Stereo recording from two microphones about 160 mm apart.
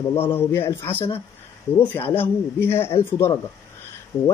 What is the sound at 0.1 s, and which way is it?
Speech, 15° left (ahead or behind).